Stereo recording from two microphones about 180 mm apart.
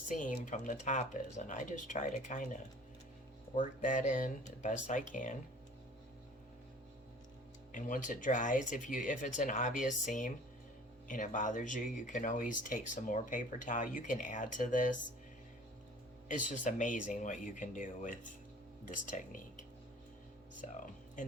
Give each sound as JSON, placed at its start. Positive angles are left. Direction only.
{"t": 0.1, "sound": "speech", "side_deg": 45}
{"t": 3.6, "sound": "speech", "side_deg": 45}
{"t": 7.7, "sound": "speech", "side_deg": 45}
{"t": 16.3, "sound": "speech", "side_deg": 45}